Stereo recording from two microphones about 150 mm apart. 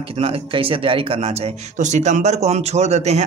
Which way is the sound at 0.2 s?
35° right (ahead or behind).